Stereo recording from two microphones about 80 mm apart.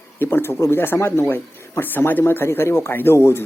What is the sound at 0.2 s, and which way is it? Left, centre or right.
Speech, left.